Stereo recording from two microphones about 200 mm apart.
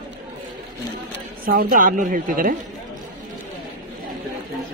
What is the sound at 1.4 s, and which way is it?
A woman's voice, 45° right (ahead or behind).